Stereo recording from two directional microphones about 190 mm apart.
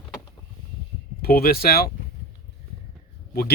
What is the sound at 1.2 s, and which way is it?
Speech, 50° left (ahead or behind).